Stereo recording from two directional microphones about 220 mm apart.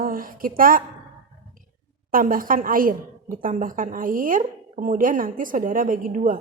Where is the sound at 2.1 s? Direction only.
40° right (ahead or behind).